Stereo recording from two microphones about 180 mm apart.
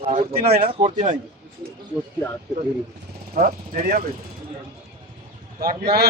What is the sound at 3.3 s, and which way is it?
Speech, 50° right (ahead or behind).